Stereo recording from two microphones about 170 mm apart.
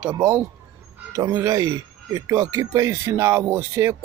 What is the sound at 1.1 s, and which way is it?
Speech, 20° right (ahead or behind).